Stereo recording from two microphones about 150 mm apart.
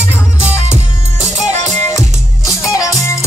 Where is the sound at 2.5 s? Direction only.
20° left (ahead or behind).